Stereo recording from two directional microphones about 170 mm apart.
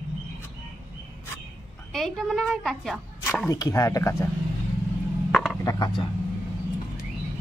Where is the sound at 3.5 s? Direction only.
20° left (ahead or behind).